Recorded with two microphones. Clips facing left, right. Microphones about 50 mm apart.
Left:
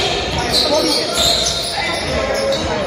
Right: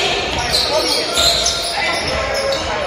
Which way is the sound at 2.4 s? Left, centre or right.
Right.